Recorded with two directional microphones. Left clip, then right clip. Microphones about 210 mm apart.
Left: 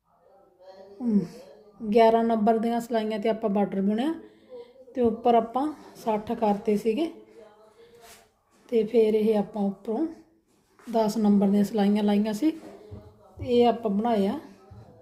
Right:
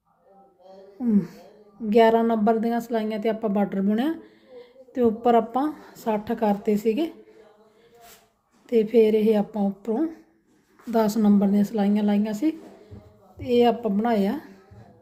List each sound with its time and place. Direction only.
1.0 s a woman's voice: 20° right (ahead or behind)
8.7 s a woman's voice: 20° right (ahead or behind); by 12.5 s 5° right (ahead or behind)
13.4 s a woman's voice: 15° right (ahead or behind)